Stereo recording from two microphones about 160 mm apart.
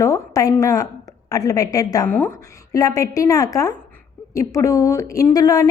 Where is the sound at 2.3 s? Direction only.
20° left (ahead or behind).